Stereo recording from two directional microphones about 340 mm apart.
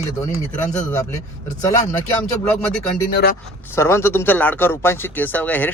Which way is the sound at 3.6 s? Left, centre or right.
Centre.